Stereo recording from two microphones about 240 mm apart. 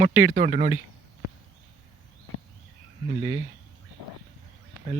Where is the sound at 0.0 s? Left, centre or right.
Right.